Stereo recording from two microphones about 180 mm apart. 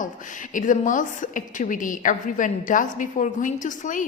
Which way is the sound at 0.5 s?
45° left (ahead or behind).